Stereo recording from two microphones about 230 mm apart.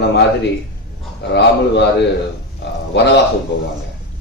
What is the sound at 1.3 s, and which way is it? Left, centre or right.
A man's voice, left.